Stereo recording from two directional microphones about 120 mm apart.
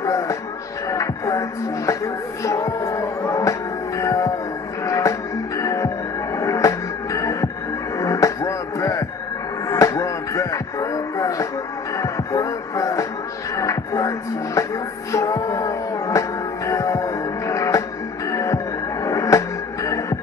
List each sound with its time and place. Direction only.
0.0 s music: 25° left (ahead or behind)
2.4 s music: 30° left (ahead or behind)